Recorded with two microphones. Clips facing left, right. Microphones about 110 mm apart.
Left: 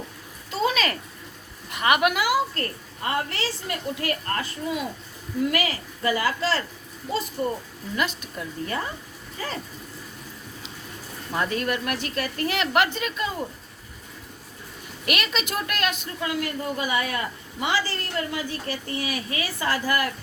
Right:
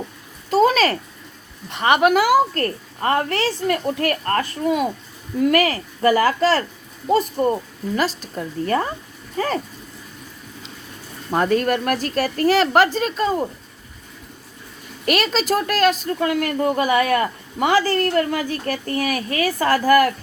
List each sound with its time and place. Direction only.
0.5 s a sound: 45° right (ahead or behind)
1.7 s a woman's voice: 30° right (ahead or behind); by 7.5 s 50° right (ahead or behind)
7.9 s a woman's voice: 35° right (ahead or behind)
8.6 s a woman's voice: 50° right (ahead or behind)
11.3 s a woman's voice: 45° right (ahead or behind)
15.0 s a woman's voice: 35° right (ahead or behind)
16.2 s a woman's voice: 55° right (ahead or behind)